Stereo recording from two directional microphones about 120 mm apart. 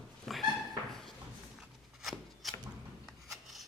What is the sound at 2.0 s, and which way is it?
Rub, centre (ahead or behind).